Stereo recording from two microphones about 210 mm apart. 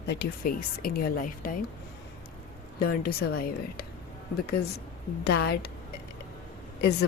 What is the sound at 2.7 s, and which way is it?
Speech, 45° left (ahead or behind).